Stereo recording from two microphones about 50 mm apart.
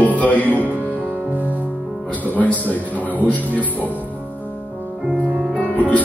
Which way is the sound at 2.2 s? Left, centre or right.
Left.